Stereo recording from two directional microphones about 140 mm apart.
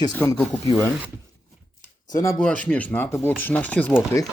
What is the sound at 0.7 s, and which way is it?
Speech, 15° left (ahead or behind).